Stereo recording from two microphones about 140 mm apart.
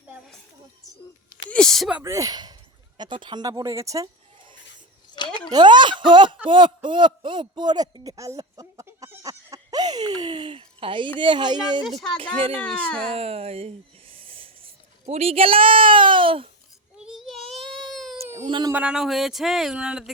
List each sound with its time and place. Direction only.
1.5 s speech: 5° left (ahead or behind)
1.9 s speech: 10° right (ahead or behind)
2.1 s speech: 25° right (ahead or behind)
5.1 s a sound: 30° left (ahead or behind)
5.5 s a man's voice: 30° right (ahead or behind)
11.9 s speech: 5° left (ahead or behind)
13.1 s a sound: 45° right (ahead or behind)
15.0 s speech: 45° right (ahead or behind)
17.0 s baby cry: 5° right (ahead or behind)
18.2 s baby cry: 20° right (ahead or behind)
18.4 s speech: 35° right (ahead or behind)
18.7 s speech: 10° right (ahead or behind)